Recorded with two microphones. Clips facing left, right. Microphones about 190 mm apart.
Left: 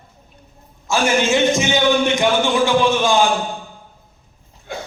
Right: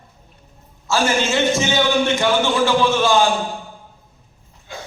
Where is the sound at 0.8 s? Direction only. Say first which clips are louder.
Left 2 dB; 15° left (ahead or behind).